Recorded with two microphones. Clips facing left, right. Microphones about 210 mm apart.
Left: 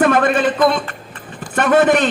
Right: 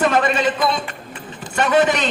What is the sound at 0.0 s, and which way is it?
A man's voice, 55° left (ahead or behind).